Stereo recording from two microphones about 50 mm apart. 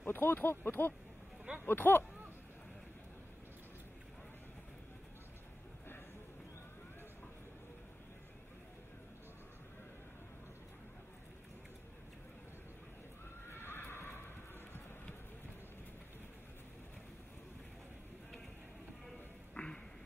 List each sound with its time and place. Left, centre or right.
0.0 s speech: left
13.5 s horse: left
19.5 s a sound: centre